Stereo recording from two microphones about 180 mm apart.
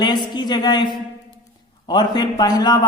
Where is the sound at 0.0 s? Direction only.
25° left (ahead or behind).